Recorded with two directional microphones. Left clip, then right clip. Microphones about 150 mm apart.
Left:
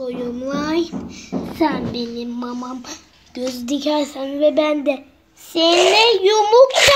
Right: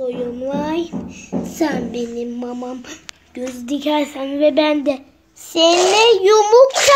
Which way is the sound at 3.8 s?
10° left (ahead or behind).